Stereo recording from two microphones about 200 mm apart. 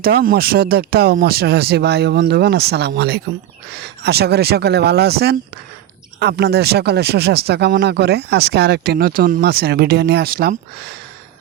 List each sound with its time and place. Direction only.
0.0 s speech: 50° right (ahead or behind)